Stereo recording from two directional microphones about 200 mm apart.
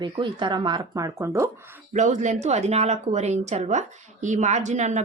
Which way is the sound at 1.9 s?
35° right (ahead or behind).